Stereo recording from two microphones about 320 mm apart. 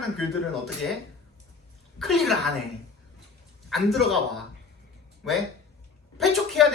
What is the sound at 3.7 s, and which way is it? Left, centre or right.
Speech, centre.